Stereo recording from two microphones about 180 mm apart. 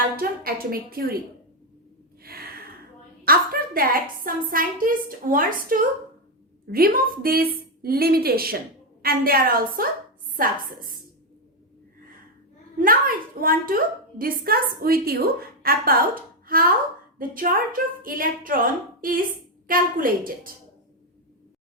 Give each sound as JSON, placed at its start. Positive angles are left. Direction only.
{"t": 0.2, "sound": "a woman's voice", "side_deg": -55}
{"t": 2.2, "sound": "a sound", "side_deg": -55}
{"t": 3.2, "sound": "a woman's voice", "side_deg": -55}
{"t": 12.8, "sound": "a woman's voice", "side_deg": -50}